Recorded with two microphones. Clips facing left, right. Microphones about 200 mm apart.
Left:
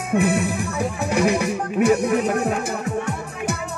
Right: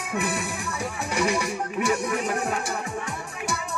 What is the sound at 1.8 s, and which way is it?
Music, 50° left (ahead or behind).